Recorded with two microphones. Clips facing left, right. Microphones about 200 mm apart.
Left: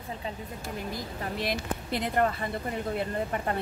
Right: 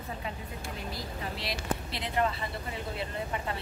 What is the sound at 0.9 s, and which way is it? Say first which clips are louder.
Speech: left 3 dB; 50° left (ahead or behind).